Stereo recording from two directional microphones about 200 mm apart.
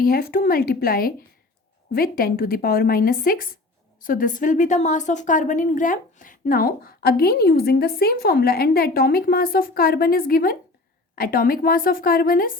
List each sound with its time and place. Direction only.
0.0 s a woman's voice: 50° left (ahead or behind)